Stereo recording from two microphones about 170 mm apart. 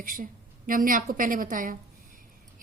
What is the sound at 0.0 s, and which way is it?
A woman's voice, 55° right (ahead or behind).